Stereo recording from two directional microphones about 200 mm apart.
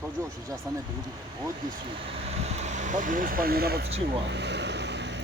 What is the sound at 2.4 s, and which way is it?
Speech, 35° right (ahead or behind).